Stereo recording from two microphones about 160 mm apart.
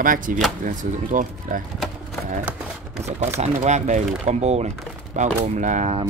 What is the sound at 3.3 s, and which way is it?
Speech, 45° right (ahead or behind).